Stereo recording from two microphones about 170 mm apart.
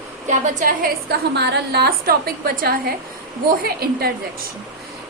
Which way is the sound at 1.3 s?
80° right.